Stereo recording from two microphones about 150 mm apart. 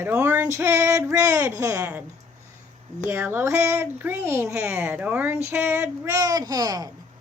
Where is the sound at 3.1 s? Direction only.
15° right (ahead or behind).